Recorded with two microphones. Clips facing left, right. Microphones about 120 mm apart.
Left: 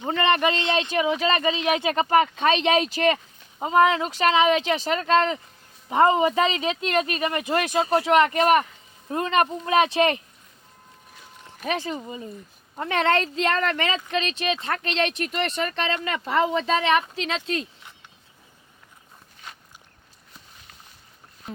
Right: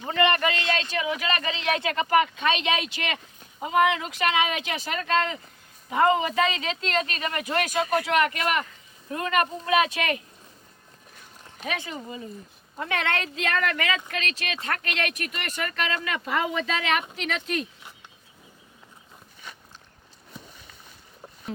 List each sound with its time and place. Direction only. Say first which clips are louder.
0.0 s speech: left 2 dB; 25° left (ahead or behind)
1.9 s speech: left 2 dB; 30° left (ahead or behind)
11.6 s speech: left 5 dB; 35° left (ahead or behind)